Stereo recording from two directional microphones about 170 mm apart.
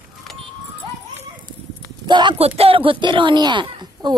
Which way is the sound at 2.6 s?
35° right (ahead or behind).